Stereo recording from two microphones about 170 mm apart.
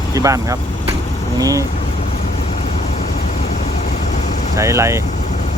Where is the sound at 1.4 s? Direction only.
20° right (ahead or behind).